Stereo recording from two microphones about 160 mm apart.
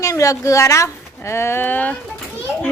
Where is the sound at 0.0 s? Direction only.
20° left (ahead or behind).